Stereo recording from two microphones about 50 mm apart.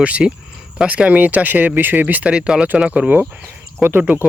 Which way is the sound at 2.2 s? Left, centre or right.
Right.